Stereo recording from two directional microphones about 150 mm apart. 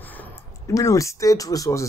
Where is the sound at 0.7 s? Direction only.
20° left (ahead or behind).